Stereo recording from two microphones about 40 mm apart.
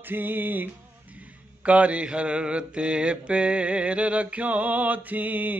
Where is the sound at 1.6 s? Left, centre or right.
Right.